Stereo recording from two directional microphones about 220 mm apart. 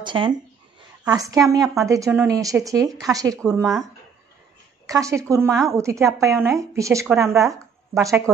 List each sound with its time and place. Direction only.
0.0 s a woman's voice: 20° right (ahead or behind)
3.6 s speech: centre (ahead or behind)
4.8 s a woman's voice: 15° right (ahead or behind)
7.2 s speech: centre (ahead or behind)
7.5 s a sound: 15° right (ahead or behind)